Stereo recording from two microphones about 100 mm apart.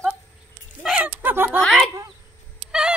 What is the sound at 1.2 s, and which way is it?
Speech, 20° right (ahead or behind).